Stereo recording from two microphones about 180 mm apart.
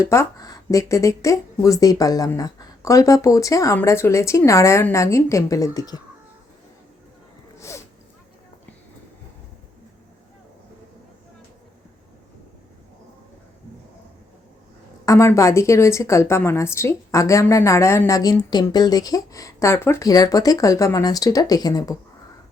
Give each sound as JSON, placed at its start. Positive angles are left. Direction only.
{"t": 0.0, "sound": "speech", "side_deg": 15}
{"t": 15.0, "sound": "speech", "side_deg": 15}